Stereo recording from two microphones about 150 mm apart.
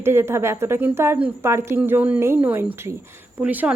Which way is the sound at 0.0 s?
15° right (ahead or behind).